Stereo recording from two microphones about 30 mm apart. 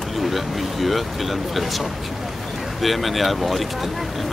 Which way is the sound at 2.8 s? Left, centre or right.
Centre.